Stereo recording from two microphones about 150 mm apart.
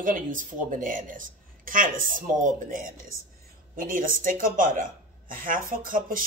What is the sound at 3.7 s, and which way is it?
A woman's voice, 70° right (ahead or behind).